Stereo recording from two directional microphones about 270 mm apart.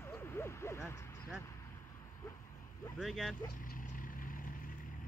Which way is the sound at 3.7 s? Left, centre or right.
Left.